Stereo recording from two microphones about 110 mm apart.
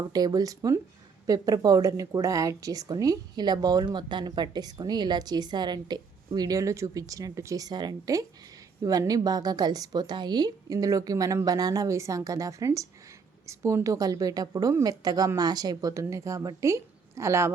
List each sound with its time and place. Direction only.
0.1 s a woman's voice: 35° right (ahead or behind)